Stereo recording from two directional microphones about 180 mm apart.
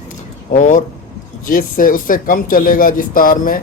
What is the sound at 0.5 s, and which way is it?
Speech, 45° left (ahead or behind).